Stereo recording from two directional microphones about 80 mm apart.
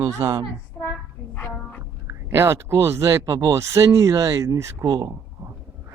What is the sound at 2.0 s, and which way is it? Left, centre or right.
Speech, right.